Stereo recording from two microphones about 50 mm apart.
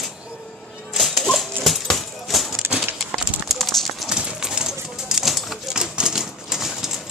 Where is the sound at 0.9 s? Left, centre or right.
Centre.